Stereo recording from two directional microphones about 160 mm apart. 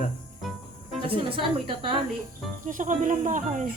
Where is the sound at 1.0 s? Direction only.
35° right (ahead or behind).